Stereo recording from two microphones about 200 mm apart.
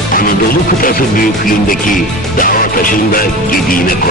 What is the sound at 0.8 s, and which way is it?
Music, 45° left (ahead or behind).